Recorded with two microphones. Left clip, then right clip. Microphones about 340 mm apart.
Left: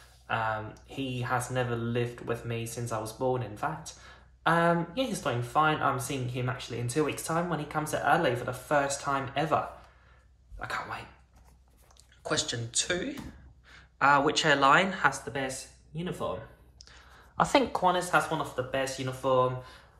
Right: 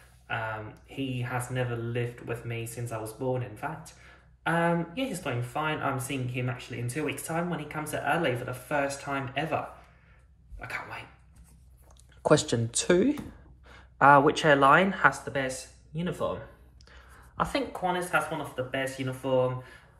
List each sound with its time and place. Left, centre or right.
0.8 s speech: centre
10.6 s speech: centre
12.2 s speech: centre
17.5 s speech: centre